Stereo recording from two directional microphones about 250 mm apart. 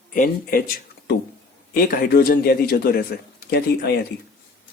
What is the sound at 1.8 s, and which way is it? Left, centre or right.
A man's voice, left.